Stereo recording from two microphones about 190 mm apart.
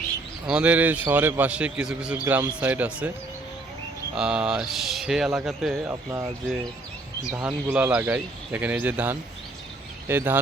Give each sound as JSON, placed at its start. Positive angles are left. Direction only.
{"t": 0.4, "sound": "a man's voice", "side_deg": -5}
{"t": 4.1, "sound": "speech", "side_deg": -5}
{"t": 5.9, "sound": "a man's voice", "side_deg": -15}
{"t": 7.4, "sound": "a man's voice", "side_deg": -5}